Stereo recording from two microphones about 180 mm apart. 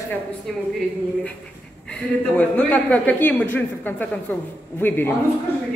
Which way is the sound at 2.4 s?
10° left (ahead or behind).